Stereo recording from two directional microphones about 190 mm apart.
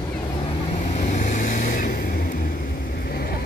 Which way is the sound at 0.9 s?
40° left (ahead or behind).